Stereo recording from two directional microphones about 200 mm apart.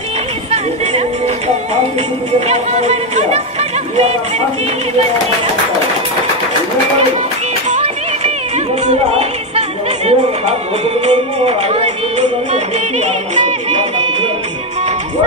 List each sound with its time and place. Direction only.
0.5 s music: 30° right (ahead or behind)
2.4 s speech: 30° right (ahead or behind)
7.7 s music: 30° right (ahead or behind)